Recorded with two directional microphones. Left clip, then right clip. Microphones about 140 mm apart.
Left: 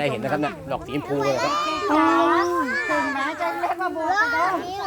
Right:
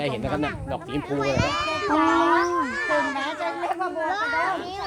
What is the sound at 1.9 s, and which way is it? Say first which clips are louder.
Speech: left 1 dB; 5° right (ahead or behind).